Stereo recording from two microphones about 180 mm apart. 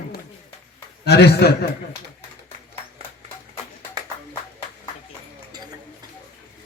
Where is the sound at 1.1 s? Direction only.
65° left (ahead or behind).